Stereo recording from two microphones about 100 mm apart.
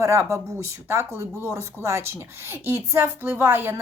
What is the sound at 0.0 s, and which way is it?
A woman's voice, 30° right (ahead or behind).